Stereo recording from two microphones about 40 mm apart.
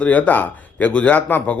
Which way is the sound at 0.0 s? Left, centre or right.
Left.